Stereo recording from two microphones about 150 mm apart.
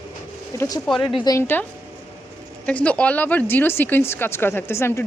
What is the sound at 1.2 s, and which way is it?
Speech, 15° left (ahead or behind).